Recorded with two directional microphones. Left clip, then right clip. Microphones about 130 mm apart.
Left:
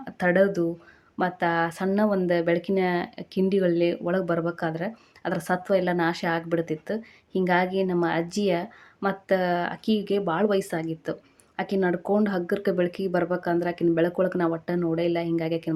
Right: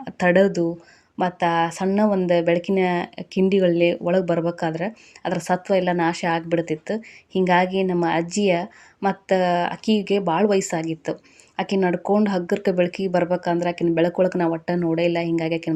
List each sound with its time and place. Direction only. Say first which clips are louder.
0.0 s speech: right 4 dB; 30° right (ahead or behind)